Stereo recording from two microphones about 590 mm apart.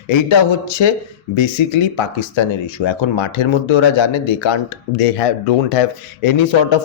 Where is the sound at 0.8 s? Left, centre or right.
Left.